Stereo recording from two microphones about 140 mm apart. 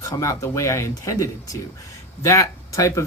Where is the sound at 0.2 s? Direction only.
20° left (ahead or behind).